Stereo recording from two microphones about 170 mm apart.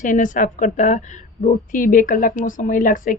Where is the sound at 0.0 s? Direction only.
50° left (ahead or behind).